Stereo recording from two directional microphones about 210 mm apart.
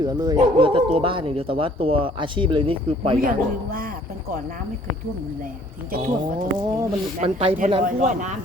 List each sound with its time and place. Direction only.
0.0 s speech: 20° right (ahead or behind)
3.2 s a man's voice: 45° right (ahead or behind)
5.9 s a man's voice: 40° right (ahead or behind)
7.2 s speech: 30° right (ahead or behind)